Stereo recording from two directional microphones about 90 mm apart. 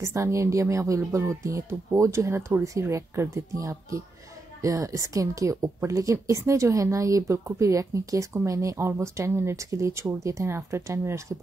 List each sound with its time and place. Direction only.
0.0 s a woman's voice: 35° right (ahead or behind)